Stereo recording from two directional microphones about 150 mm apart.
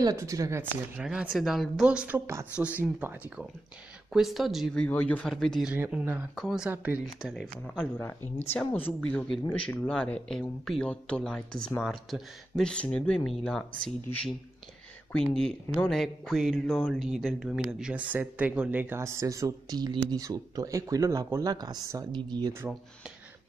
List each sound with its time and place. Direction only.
0.0 s speech: 20° right (ahead or behind)
0.9 s speech: 5° right (ahead or behind)
4.1 s speech: centre (ahead or behind)
4.8 s speech: 10° left (ahead or behind)
9.1 s speech: 5° left (ahead or behind); by 22.5 s 30° right (ahead or behind)
22.5 s speech: 10° right (ahead or behind)